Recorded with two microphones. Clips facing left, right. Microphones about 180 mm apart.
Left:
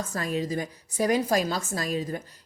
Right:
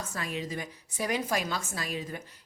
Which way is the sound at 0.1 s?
40° left (ahead or behind).